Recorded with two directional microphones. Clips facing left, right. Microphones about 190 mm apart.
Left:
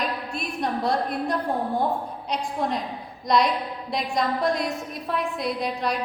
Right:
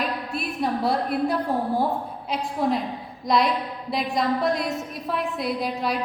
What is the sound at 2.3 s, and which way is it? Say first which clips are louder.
A woman's voice: right 3 dB; 5° right (ahead or behind).